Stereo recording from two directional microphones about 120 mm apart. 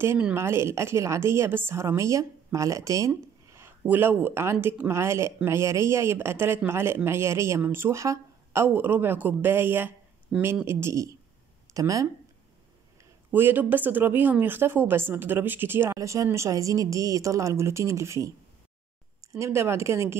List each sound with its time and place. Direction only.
0.2 s speech: 20° right (ahead or behind)
13.3 s speech: 15° right (ahead or behind)